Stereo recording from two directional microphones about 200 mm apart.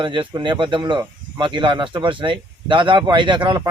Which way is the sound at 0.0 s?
25° right (ahead or behind).